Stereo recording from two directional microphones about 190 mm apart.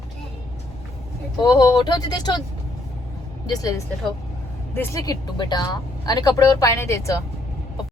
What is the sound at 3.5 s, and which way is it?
Speech, 20° left (ahead or behind).